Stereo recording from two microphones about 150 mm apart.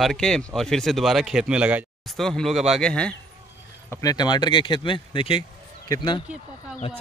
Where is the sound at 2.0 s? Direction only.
Centre (ahead or behind).